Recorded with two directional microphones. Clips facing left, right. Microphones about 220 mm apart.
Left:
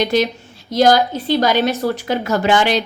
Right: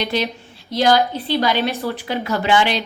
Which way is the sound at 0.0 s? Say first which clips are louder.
Left 5 dB; 45° left (ahead or behind).